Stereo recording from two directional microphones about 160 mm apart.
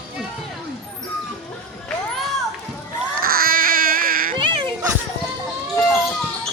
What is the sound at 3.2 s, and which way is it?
Baby cry, 65° right (ahead or behind).